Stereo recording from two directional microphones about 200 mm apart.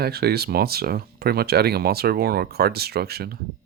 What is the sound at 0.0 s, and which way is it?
Speech, 50° right (ahead or behind).